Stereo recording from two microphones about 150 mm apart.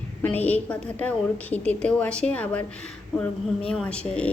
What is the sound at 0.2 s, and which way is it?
A woman's voice, 10° left (ahead or behind).